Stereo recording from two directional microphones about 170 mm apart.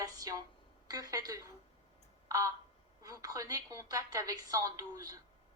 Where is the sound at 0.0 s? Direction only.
20° right (ahead or behind).